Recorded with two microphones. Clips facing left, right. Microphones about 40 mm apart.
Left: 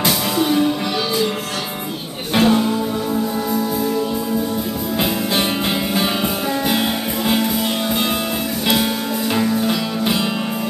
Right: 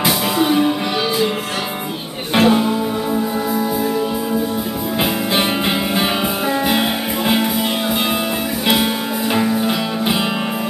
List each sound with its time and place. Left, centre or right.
0.0 s music: centre
2.3 s music: centre
6.7 s music: centre
9.3 s music: centre